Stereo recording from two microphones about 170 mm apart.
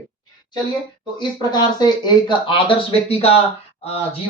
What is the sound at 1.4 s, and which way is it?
Speech, 25° left (ahead or behind).